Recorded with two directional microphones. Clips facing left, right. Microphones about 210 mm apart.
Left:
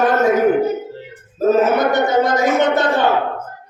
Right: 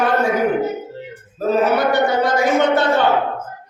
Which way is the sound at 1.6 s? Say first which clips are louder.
Left 1 dB; 20° left (ahead or behind).